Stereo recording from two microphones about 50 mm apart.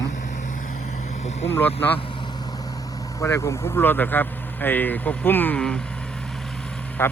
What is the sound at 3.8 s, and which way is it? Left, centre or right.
Speech, left.